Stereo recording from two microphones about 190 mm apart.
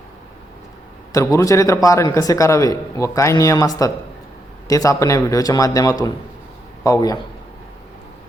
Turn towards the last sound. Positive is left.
turn(degrees=20)  # may be behind; listen again after turning